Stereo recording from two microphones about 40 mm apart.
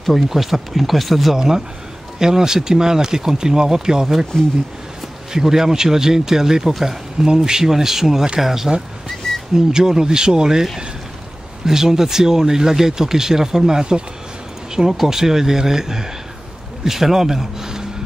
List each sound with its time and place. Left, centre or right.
0.0 s speech: centre
1.3 s speech: centre
5.3 s speech: centre
9.2 s a sound: centre
9.7 s speech: centre